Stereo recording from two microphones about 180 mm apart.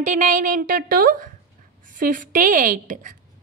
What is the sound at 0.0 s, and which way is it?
A woman's voice, 45° right (ahead or behind).